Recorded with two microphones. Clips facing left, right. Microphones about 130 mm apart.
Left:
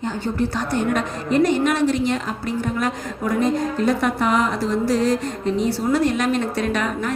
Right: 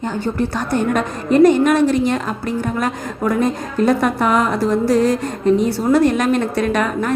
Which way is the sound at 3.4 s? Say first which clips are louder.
Left 1 dB; 50° right (ahead or behind).